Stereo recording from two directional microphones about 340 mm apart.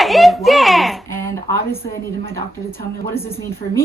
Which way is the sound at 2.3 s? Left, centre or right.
Centre.